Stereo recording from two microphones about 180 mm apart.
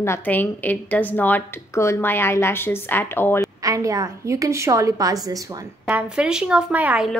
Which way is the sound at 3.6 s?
20° right (ahead or behind).